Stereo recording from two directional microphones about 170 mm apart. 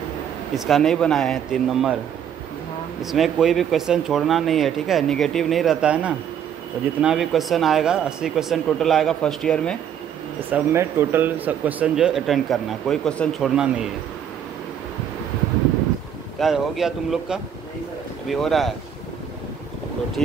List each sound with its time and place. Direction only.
0.6 s a man's voice: centre (ahead or behind)
3.0 s a man's voice: centre (ahead or behind)
10.5 s a man's voice: 15° right (ahead or behind)
16.3 s a man's voice: centre (ahead or behind)